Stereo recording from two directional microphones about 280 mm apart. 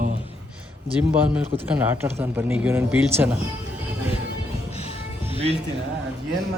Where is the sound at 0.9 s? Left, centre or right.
Centre.